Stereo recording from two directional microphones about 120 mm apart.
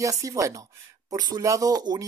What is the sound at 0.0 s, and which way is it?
Speech, 30° right (ahead or behind).